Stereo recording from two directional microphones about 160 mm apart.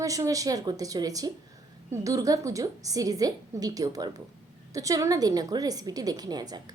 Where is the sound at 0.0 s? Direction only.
20° right (ahead or behind).